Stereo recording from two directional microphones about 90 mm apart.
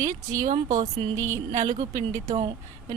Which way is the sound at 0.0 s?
40° right (ahead or behind).